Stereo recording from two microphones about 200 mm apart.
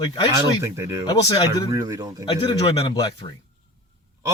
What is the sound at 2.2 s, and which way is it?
Speech, 20° left (ahead or behind).